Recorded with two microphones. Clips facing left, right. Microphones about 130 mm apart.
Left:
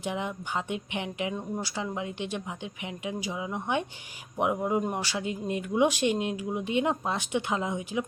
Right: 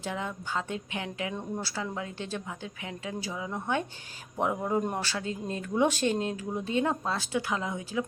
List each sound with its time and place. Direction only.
0.0 s speech: 15° left (ahead or behind)